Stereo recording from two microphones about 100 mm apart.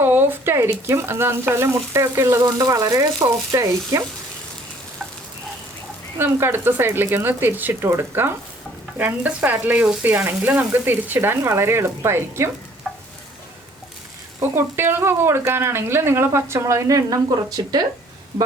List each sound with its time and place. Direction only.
0.0 s speech: 20° right (ahead or behind)
6.1 s speech: 25° right (ahead or behind)
12.9 s stir: 5° left (ahead or behind)
14.3 s speech: 25° right (ahead or behind); by 17.8 s 40° right (ahead or behind)